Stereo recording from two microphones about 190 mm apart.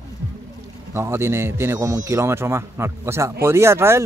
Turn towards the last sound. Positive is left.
turn(degrees=-15)  # may be behind; listen again after turning